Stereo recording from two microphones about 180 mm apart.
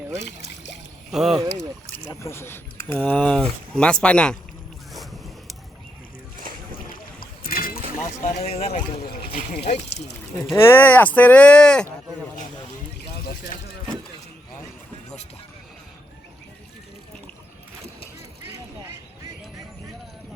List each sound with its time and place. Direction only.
0.2 s a sound: 75° left (ahead or behind)
1.1 s speech: 5° right (ahead or behind)
1.4 s speech: 20° right (ahead or behind)
2.0 s speech: 15° left (ahead or behind)
4.9 s boat: centre (ahead or behind)
7.2 s boat: 55° left (ahead or behind)
7.9 s a sound: 45° left (ahead or behind)
8.4 s speech: 35° left (ahead or behind)
10.5 s speech: 15° left (ahead or behind)
13.2 s speech: 55° left (ahead or behind)